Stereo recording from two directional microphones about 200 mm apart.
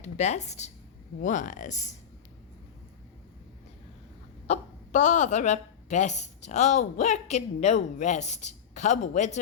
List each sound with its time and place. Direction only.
0.0 s speech: 35° left (ahead or behind)
4.4 s speech: 35° left (ahead or behind)